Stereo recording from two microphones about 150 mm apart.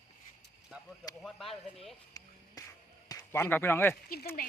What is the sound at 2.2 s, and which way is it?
Music, 25° left (ahead or behind).